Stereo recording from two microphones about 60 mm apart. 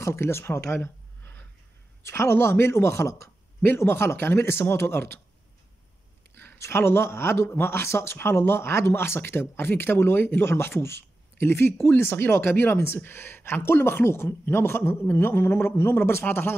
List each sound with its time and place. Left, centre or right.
0.0 s speech: left
2.0 s speech: left
6.3 s speech: left